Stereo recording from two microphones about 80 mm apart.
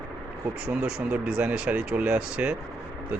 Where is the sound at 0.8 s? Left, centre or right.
Centre.